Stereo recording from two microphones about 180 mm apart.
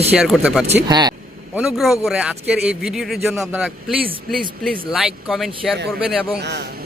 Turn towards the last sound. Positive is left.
turn(degrees=0)  # may be behind; listen again after turning